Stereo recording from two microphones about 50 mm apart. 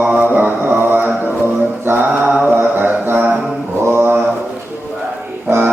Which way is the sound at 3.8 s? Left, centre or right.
Right.